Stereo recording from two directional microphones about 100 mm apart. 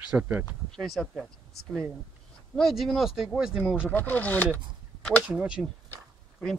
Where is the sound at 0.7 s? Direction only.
5° left (ahead or behind).